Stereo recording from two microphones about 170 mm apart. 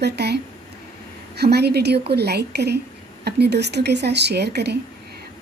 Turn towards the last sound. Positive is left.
turn(degrees=-75)  # may be behind; listen again after turning